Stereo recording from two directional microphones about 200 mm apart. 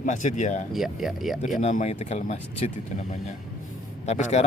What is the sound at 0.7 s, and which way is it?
Speech, centre (ahead or behind).